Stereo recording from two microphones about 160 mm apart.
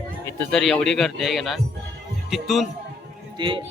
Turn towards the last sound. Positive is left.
turn(degrees=-30)  # may be behind; listen again after turning